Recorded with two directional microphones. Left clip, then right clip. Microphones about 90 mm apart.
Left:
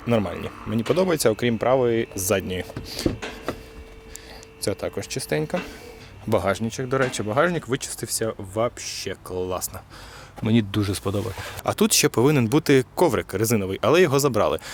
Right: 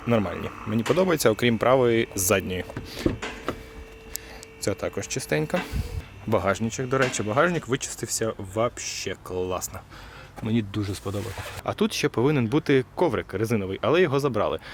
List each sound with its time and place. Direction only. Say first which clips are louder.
0.0 s speech: left 1 dB; 10° left (ahead or behind)
2.5 s a sound: left 2 dB; 15° left (ahead or behind)
4.6 s speech: left 1 dB; 5° left (ahead or behind)
6.3 s speech: left 1 dB; 10° left (ahead or behind)
10.4 s speech: left 5 dB; 45° left (ahead or behind)
11.2 s speech: left 4 dB; 5° left (ahead or behind)
11.6 s speech: left 5 dB; 40° left (ahead or behind)